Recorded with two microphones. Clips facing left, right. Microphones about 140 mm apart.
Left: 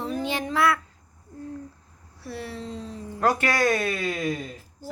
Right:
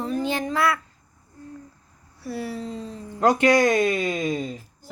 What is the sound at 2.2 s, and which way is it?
Speech, centre (ahead or behind).